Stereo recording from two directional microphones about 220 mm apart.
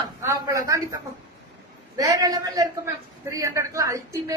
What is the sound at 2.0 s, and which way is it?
A woman's voice, 15° right (ahead or behind).